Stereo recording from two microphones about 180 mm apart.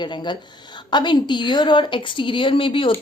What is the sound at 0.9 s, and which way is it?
A woman's voice, 25° left (ahead or behind).